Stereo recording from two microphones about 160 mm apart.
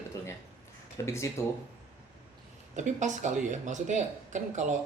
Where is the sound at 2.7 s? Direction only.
50° right (ahead or behind).